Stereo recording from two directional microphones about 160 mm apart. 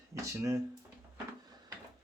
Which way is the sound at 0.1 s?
20° right (ahead or behind).